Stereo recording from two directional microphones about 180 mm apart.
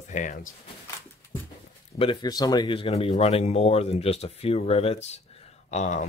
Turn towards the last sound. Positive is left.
turn(degrees=40)  # may be behind; listen again after turning